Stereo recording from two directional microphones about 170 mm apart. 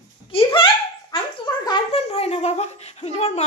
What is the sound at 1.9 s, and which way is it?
Speech, 40° left (ahead or behind).